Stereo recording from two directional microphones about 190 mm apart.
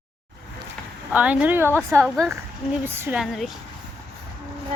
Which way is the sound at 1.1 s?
5° right (ahead or behind).